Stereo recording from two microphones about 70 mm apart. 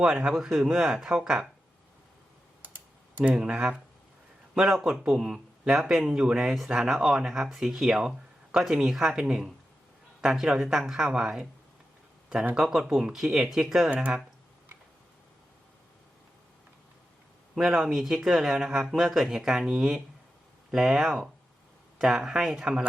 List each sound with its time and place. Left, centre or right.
0.0 s speech: centre
0.3 s speech: centre
2.6 s typing: right
3.3 s speech: centre
4.5 s a man's voice: centre
12.5 s speech: centre
13.9 s speech: right
17.5 s speech: centre